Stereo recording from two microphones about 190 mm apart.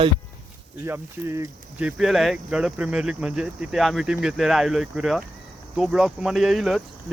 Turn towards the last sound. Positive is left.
turn(degrees=0)  # may be behind; listen again after turning